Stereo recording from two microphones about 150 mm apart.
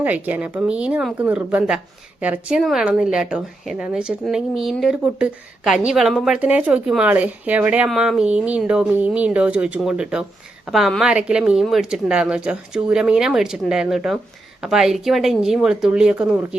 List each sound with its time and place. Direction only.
0.0 s speech: 10° right (ahead or behind)